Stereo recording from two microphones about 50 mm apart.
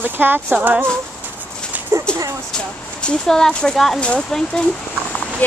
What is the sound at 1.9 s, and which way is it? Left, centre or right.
Speech, right.